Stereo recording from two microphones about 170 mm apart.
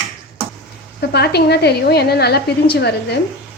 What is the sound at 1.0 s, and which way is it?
A woman's voice, 70° left (ahead or behind).